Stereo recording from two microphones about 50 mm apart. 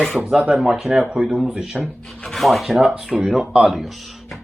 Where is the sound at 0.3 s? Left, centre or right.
Centre.